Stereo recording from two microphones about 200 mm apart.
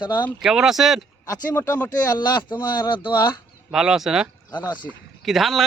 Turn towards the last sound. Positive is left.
turn(degrees=0)  # may be behind; listen again after turning